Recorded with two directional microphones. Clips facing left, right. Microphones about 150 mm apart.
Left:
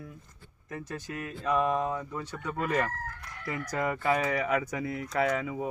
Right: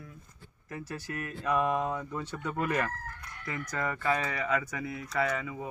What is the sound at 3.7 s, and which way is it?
Speech, 15° left (ahead or behind).